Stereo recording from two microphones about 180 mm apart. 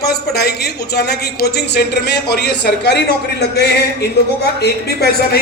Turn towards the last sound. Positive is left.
turn(degrees=65)  # may be behind; listen again after turning